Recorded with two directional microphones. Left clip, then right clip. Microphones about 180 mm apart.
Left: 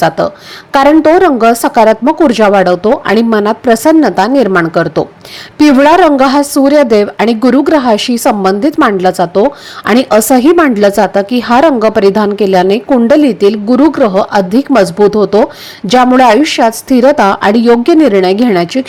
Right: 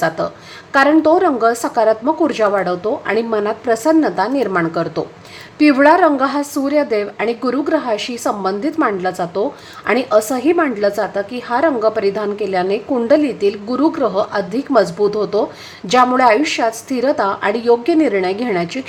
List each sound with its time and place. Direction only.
0.7 s a woman's voice: 40° left (ahead or behind)